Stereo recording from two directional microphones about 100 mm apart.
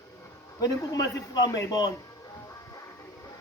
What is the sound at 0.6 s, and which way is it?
A man's voice, 35° left (ahead or behind).